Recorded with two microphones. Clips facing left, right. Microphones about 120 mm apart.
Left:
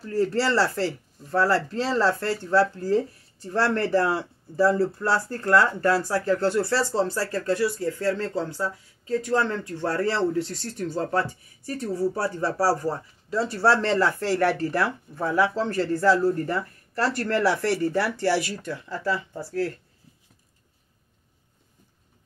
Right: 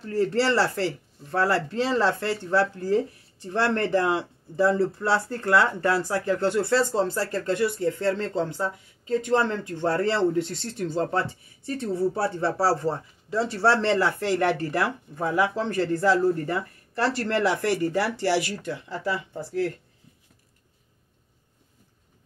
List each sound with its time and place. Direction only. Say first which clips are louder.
0.3 s speech: even; 15° right (ahead or behind)